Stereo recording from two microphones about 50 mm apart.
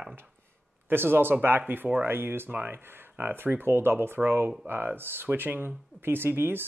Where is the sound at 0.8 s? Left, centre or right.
Right.